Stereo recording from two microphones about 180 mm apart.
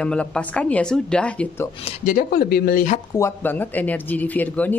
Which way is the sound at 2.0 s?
50° left (ahead or behind).